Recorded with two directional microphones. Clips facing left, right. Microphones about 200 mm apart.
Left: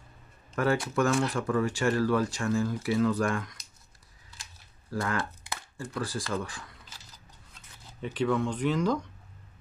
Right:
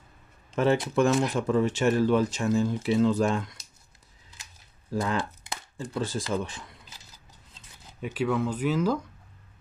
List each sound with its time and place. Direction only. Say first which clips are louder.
0.6 s speech: right 3 dB; 25° right (ahead or behind)
4.9 s speech: right 3 dB; 20° right (ahead or behind)
8.0 s speech: right 1 dB; 10° right (ahead or behind)